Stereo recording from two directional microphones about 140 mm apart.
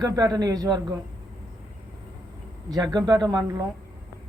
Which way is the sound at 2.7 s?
25° right (ahead or behind).